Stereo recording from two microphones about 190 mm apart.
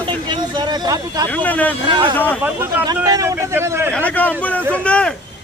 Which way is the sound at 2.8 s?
20° right (ahead or behind).